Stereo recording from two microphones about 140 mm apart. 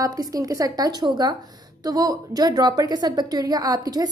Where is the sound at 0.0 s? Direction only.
25° right (ahead or behind).